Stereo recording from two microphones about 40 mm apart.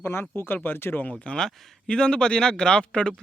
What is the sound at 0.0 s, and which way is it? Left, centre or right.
Speech, left.